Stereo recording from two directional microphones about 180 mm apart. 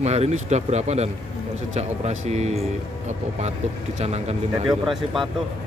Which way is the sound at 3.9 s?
35° right (ahead or behind).